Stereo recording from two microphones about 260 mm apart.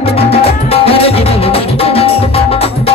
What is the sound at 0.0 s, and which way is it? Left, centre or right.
Music, left.